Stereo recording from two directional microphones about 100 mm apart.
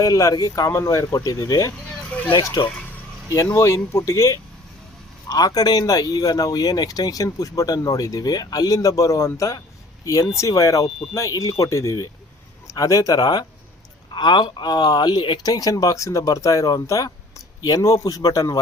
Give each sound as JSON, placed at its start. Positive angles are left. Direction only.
{"t": 0.0, "sound": "speech", "side_deg": 35}
{"t": 2.6, "sound": "speech", "side_deg": 60}
{"t": 3.5, "sound": "speech", "side_deg": 30}